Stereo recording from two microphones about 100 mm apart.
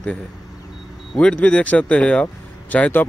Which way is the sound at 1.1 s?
10° left (ahead or behind).